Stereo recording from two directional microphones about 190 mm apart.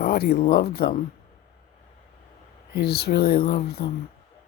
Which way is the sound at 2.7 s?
60° left (ahead or behind).